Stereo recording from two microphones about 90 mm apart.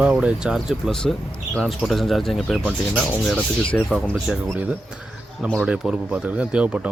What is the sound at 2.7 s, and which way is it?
Speech, 15° left (ahead or behind).